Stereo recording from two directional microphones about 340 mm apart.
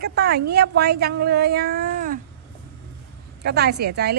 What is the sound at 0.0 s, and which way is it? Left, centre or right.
A woman's voice, right.